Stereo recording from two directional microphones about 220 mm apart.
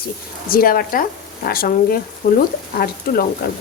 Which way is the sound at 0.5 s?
40° left (ahead or behind).